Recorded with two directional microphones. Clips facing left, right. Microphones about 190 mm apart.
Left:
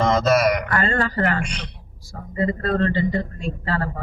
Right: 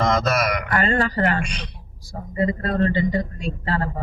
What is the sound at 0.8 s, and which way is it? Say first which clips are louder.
Speech: right 1 dB; 20° right (ahead or behind).